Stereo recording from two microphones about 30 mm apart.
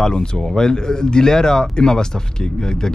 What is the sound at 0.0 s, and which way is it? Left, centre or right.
Speech, left.